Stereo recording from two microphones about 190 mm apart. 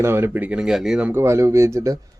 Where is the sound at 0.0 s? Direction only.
10° right (ahead or behind).